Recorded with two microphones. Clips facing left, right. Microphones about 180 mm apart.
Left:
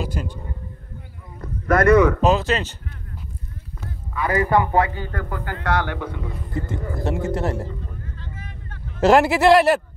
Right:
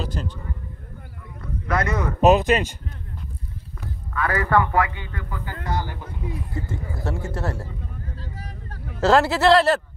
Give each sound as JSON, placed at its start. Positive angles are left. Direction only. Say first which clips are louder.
{"t": 0.0, "sound": "speech", "louder": "left 2 dB", "side_deg": 10}
{"t": 1.4, "sound": "a sound", "louder": "left 7 dB", "side_deg": 50}
{"t": 2.2, "sound": "speech", "louder": "right 3 dB", "side_deg": -15}
{"t": 4.1, "sound": "speech", "louder": "left 2 dB", "side_deg": 15}
{"t": 4.6, "sound": "speech", "louder": "left 3 dB", "side_deg": 30}
{"t": 5.2, "sound": "speech", "louder": "left 3 dB", "side_deg": 60}
{"t": 7.0, "sound": "speech", "louder": "left 6 dB", "side_deg": 20}
{"t": 8.2, "sound": "vehicle", "louder": "right 1 dB", "side_deg": -35}
{"t": 9.0, "sound": "speech", "louder": "left 3 dB", "side_deg": 15}